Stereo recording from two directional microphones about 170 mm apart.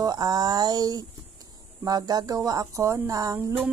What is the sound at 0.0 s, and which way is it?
A woman's voice, 25° right (ahead or behind).